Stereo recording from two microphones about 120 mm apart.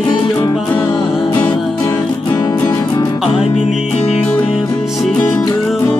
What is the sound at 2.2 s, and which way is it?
Music, 35° left (ahead or behind).